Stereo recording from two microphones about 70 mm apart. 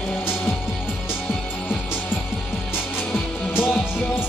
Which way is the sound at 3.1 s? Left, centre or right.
Left.